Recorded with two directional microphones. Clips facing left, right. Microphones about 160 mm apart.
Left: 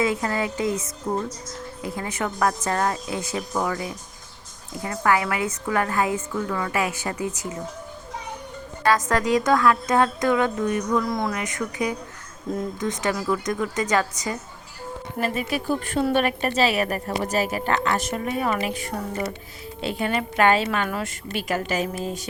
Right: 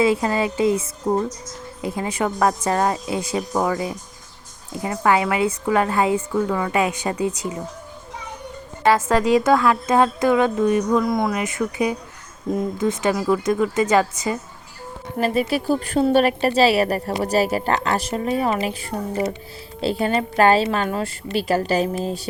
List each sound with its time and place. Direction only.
0.0 s a woman's voice: 25° right (ahead or behind)
3.5 s a woman's voice: 35° right (ahead or behind)
4.7 s a woman's voice: 20° right (ahead or behind)
8.8 s a woman's voice: 15° right (ahead or behind)
13.0 s a woman's voice: 20° right (ahead or behind)
15.2 s a woman's voice: 35° right (ahead or behind)